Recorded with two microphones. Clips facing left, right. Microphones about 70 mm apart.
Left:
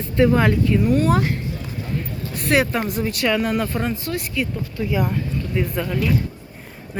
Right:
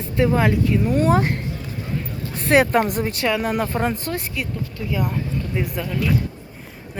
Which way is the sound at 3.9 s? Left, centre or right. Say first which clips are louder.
Even; right.